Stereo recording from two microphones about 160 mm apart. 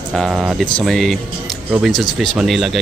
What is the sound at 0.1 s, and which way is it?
A man's voice, 5° right (ahead or behind).